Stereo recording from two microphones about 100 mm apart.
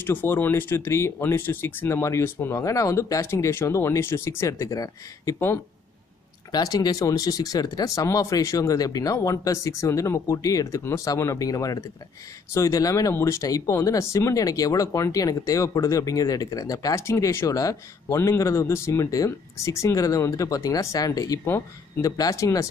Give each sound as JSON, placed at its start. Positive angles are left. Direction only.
{"t": 0.0, "sound": "speech", "side_deg": 20}
{"t": 6.5, "sound": "speech", "side_deg": 40}
{"t": 21.5, "sound": "speech", "side_deg": 25}
{"t": 22.1, "sound": "speech", "side_deg": 35}